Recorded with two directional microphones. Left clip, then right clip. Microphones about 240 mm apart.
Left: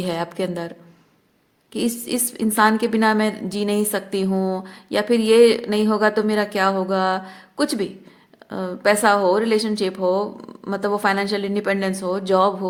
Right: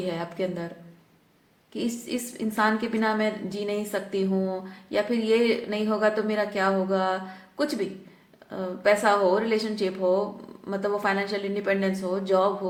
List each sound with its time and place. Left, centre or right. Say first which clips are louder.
0.0 s a woman's voice: left 5 dB; left
1.7 s a woman's voice: left 6 dB; left